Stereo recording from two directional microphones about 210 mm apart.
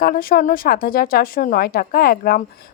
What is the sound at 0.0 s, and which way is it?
Speech, 45° left (ahead or behind).